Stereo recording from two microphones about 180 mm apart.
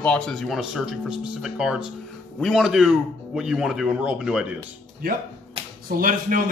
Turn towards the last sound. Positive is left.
turn(degrees=-50)  # may be behind; listen again after turning